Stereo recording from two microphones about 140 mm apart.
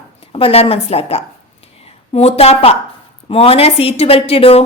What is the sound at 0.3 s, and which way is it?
A woman's voice, 45° left (ahead or behind).